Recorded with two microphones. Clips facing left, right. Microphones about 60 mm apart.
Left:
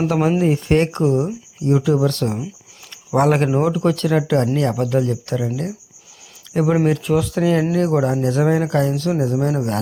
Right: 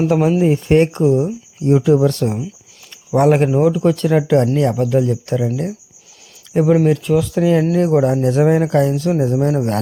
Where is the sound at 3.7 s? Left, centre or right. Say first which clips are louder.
Right 3 dB; centre.